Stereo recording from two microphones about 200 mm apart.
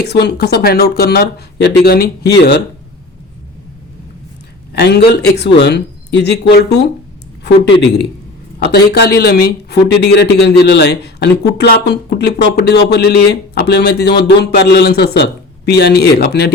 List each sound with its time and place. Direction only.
0.0 s speech: 55° left (ahead or behind)
4.7 s speech: 55° left (ahead or behind)